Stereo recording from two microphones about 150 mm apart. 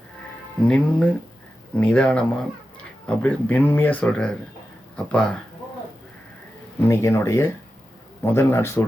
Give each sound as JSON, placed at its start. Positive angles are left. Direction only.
{"t": 0.6, "sound": "speech", "side_deg": 5}
{"t": 6.8, "sound": "speech", "side_deg": 20}